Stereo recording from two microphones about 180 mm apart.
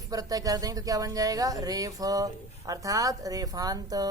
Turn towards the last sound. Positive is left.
turn(degrees=-20)  # may be behind; listen again after turning